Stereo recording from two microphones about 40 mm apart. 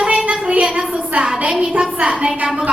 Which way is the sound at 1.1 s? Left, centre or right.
Right.